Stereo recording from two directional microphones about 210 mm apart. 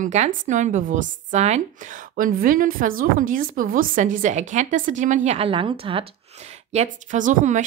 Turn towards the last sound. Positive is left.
turn(degrees=-35)  # may be behind; listen again after turning